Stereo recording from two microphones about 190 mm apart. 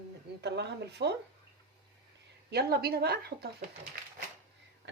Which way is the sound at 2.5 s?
55° right (ahead or behind).